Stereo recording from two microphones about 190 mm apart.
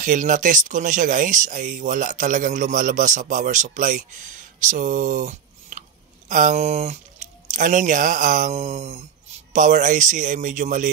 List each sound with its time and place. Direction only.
0.0 s speech: 45° right (ahead or behind)